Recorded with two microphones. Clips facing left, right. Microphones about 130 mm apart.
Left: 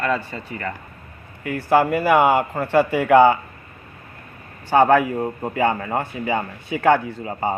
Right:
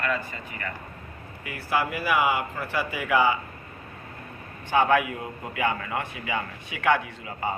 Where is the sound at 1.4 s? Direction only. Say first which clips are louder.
Left 9 dB; 50° left (ahead or behind).